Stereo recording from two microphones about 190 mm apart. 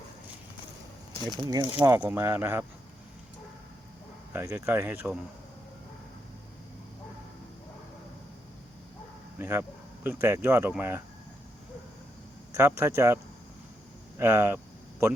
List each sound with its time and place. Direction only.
1.3 s speech: 20° right (ahead or behind)
4.3 s speech: 10° right (ahead or behind)
9.4 s speech: 10° right (ahead or behind)
12.5 s speech: 15° right (ahead or behind)
14.2 s speech: 15° right (ahead or behind)